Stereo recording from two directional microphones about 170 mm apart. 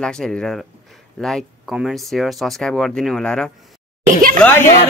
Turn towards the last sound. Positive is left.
turn(degrees=15)  # may be behind; listen again after turning